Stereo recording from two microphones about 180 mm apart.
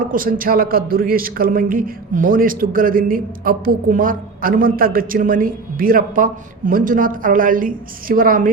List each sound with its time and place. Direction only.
0.1 s speech: 50° right (ahead or behind)